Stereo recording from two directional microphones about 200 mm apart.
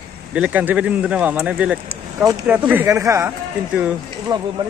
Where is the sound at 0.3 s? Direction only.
5° right (ahead or behind).